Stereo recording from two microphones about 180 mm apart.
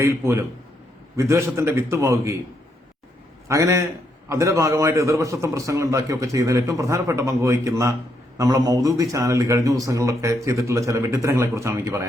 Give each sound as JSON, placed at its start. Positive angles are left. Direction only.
{"t": 0.0, "sound": "speech", "side_deg": -15}
{"t": 3.5, "sound": "speech", "side_deg": -15}